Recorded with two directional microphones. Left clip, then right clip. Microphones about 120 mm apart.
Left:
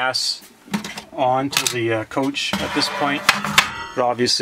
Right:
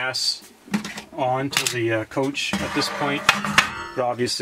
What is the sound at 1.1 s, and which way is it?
Speech, 30° left (ahead or behind).